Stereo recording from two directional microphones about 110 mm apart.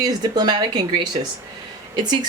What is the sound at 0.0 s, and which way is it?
Speech, 40° right (ahead or behind).